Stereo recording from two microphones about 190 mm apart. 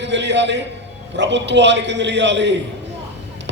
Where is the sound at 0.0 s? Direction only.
70° right (ahead or behind).